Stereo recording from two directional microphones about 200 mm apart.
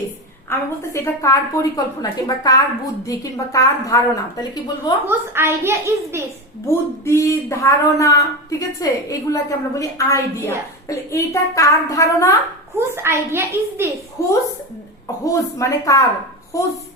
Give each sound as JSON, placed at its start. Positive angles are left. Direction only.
{"t": 0.5, "sound": "a woman's voice", "side_deg": 10}
{"t": 5.0, "sound": "a child's voice", "side_deg": -10}
{"t": 6.7, "sound": "a woman's voice", "side_deg": 15}
{"t": 12.7, "sound": "a child's voice", "side_deg": -10}
{"t": 14.2, "sound": "a woman's voice", "side_deg": 15}